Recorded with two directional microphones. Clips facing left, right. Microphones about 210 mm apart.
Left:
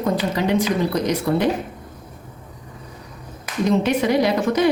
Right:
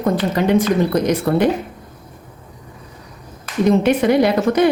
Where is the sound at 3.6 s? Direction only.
55° right (ahead or behind).